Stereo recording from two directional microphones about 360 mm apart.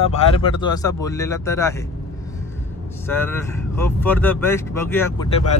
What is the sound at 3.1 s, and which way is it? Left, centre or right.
Speech, centre.